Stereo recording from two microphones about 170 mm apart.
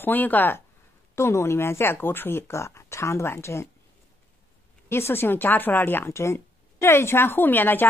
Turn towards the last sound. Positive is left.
turn(degrees=10)  # may be behind; listen again after turning